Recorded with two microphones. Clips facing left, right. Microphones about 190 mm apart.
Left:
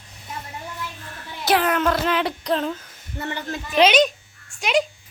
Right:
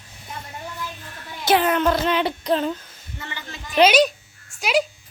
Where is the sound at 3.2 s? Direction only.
55° left (ahead or behind).